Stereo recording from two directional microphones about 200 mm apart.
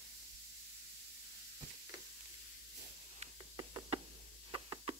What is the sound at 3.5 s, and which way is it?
Knock, 20° right (ahead or behind).